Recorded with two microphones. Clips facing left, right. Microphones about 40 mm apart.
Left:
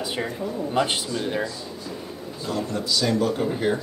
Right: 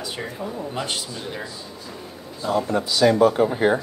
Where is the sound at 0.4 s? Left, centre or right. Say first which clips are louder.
Left 1 dB; centre.